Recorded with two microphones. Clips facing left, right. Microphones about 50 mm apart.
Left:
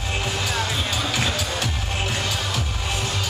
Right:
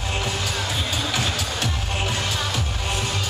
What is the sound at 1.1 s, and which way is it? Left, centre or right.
Music, left.